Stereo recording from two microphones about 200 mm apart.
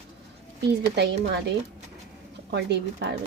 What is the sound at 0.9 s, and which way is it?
A woman's voice, 55° right (ahead or behind).